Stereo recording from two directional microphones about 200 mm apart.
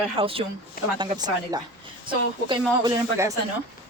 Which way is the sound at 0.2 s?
30° right (ahead or behind).